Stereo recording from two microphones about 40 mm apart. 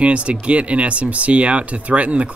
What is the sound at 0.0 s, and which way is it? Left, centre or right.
Speech, right.